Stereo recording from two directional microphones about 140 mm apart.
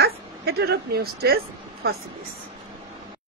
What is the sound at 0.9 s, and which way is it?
Speech, 90° right.